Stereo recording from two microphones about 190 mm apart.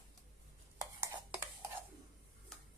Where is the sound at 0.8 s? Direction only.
15° right (ahead or behind).